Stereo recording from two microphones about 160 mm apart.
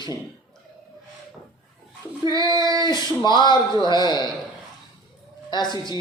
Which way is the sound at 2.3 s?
20° right (ahead or behind).